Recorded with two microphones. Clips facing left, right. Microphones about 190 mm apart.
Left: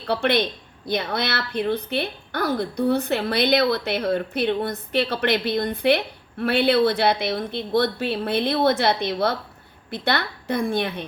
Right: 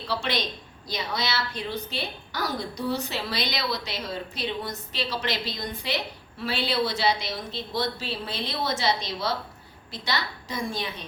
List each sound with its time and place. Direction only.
0.1 s a woman's voice: 60° left (ahead or behind)